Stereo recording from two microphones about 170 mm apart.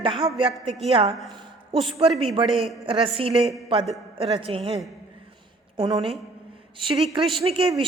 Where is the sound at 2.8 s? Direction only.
30° right (ahead or behind).